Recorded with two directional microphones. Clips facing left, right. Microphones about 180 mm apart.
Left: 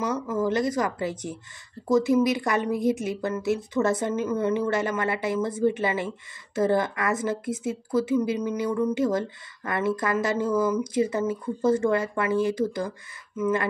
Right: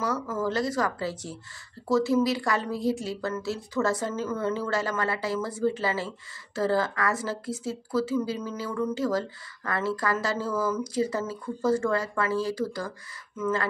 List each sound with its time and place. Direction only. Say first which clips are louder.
0.0 s a woman's voice: left 3 dB; 15° left (ahead or behind)